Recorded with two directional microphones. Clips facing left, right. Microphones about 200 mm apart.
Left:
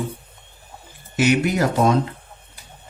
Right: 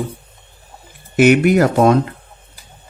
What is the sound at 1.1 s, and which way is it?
Speech, 60° right (ahead or behind).